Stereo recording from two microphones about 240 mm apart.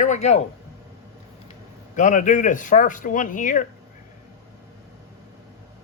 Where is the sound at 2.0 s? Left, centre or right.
Left.